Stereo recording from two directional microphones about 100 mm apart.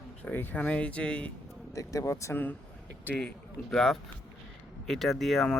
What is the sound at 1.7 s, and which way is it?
Speech, 35° left (ahead or behind).